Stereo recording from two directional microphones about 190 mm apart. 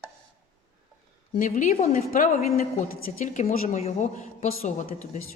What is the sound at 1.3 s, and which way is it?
A woman's voice, 45° left (ahead or behind).